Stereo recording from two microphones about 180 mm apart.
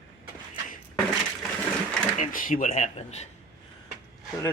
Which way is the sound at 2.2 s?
50° left (ahead or behind).